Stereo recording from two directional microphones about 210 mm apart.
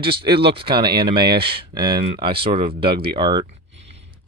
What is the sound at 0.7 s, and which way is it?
Speech, 50° right (ahead or behind).